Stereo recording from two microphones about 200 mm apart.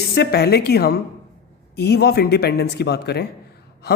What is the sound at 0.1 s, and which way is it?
A man's voice, 55° left (ahead or behind).